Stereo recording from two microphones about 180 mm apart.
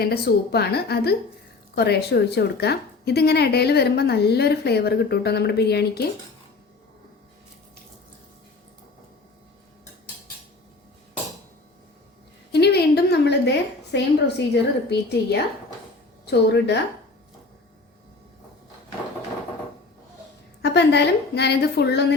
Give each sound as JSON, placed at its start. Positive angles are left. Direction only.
{"t": 0.0, "sound": "a woman's voice", "side_deg": 60}
{"t": 12.5, "sound": "a sound", "side_deg": 65}
{"t": 13.9, "sound": "a woman's voice", "side_deg": 70}
{"t": 20.6, "sound": "a woman's voice", "side_deg": 70}